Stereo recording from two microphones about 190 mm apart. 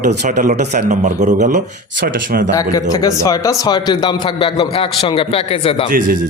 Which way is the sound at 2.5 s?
20° left (ahead or behind).